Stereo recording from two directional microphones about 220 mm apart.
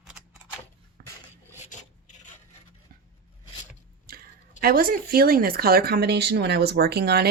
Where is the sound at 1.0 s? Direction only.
45° right (ahead or behind).